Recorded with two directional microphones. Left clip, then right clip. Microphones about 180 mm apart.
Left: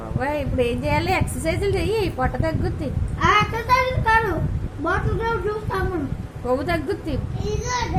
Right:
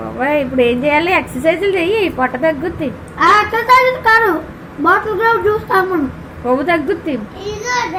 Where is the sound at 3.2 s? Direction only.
30° right (ahead or behind).